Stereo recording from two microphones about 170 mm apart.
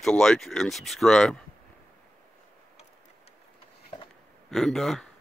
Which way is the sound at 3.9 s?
25° left (ahead or behind).